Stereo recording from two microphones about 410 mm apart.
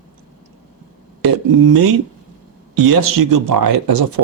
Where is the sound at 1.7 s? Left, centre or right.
Right.